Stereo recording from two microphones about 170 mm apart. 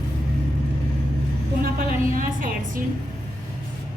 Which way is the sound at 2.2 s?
55° right (ahead or behind).